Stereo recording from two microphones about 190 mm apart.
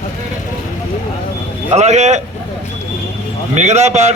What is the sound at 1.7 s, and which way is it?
Speech, 35° right (ahead or behind).